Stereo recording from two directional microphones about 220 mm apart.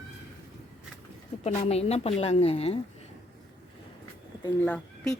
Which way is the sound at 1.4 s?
30° left (ahead or behind).